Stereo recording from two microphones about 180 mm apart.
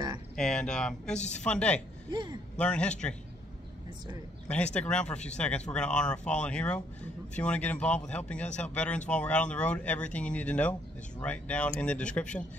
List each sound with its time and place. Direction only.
0.4 s speech: 5° left (ahead or behind)
2.0 s speech: 25° right (ahead or behind)
2.5 s a man's voice: 5° left (ahead or behind)
4.7 s speech: 5° left (ahead or behind)